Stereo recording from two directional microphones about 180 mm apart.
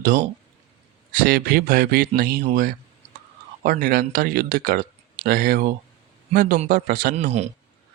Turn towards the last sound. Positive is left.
turn(degrees=-40)  # may be behind; listen again after turning